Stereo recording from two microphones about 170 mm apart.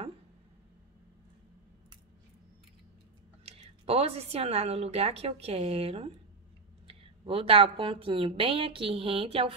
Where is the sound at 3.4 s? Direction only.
35° right (ahead or behind).